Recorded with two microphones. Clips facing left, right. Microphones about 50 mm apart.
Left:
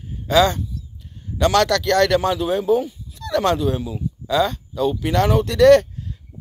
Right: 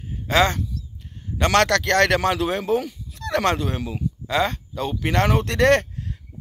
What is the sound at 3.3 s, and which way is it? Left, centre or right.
Speech, right.